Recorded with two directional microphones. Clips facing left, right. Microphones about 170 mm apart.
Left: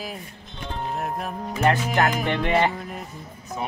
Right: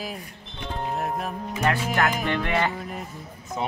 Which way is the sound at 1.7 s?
20° left (ahead or behind).